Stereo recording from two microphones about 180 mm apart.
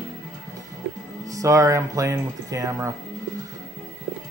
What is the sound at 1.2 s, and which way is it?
Speech, 20° right (ahead or behind).